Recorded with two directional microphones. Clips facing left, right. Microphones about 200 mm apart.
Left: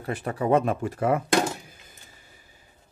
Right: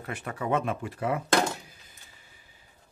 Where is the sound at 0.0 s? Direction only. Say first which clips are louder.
Left 6 dB; 35° left (ahead or behind).